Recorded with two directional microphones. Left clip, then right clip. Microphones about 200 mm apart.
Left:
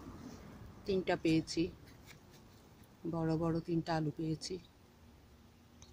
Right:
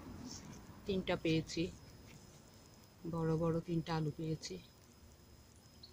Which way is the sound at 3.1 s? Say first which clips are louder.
Left 1 dB; 25° left (ahead or behind).